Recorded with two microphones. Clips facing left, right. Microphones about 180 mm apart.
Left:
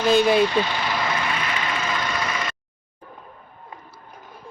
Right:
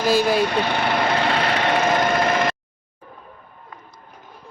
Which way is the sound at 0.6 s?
60° right (ahead or behind).